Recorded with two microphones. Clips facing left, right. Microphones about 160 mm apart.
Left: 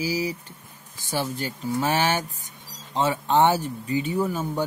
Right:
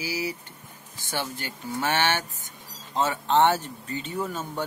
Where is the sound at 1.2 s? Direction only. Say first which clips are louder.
Left 5 dB; 40° left (ahead or behind).